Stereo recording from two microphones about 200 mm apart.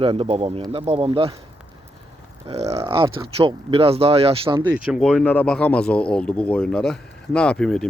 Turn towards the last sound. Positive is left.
turn(degrees=5)  # may be behind; listen again after turning